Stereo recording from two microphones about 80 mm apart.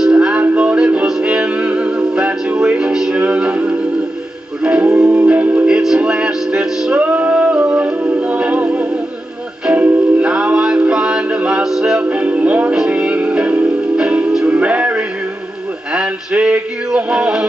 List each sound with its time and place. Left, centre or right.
0.0 s music: centre
5.8 s male singing: centre
7.0 s music: centre
15.9 s male singing: centre